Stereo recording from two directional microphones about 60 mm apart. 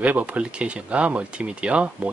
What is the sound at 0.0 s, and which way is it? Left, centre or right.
Speech, right.